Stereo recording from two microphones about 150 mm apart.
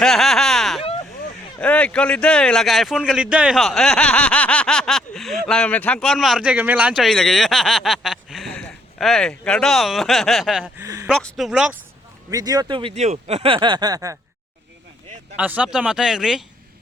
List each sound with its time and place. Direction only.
0.0 s speech: centre (ahead or behind)
10.8 s speech: 20° right (ahead or behind)
11.1 s speech: centre (ahead or behind)
12.3 s speech: 25° right (ahead or behind)
12.9 s speech: 50° right (ahead or behind); by 14.2 s 25° right (ahead or behind)
15.4 s speech: 10° right (ahead or behind)